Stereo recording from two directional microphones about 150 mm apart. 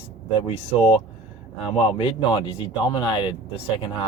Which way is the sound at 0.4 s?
40° left (ahead or behind).